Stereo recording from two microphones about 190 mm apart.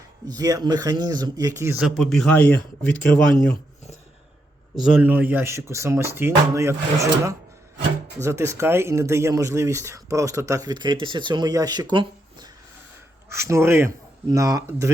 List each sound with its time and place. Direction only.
0.3 s speech: 20° right (ahead or behind)
1.8 s speech: centre (ahead or behind)
4.7 s speech: 5° right (ahead or behind)